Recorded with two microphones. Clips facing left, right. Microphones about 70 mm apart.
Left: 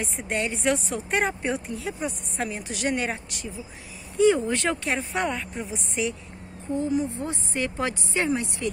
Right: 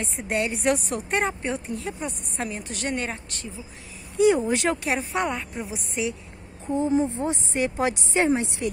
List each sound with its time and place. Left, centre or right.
0.0 s a woman's voice: centre
4.2 s a woman's voice: centre
6.9 s speech: right